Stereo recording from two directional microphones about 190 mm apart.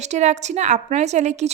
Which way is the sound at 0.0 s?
35° right (ahead or behind).